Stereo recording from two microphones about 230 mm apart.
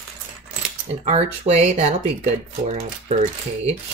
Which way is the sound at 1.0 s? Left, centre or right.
Right.